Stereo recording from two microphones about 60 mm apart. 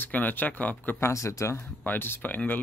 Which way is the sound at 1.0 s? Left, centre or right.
Left.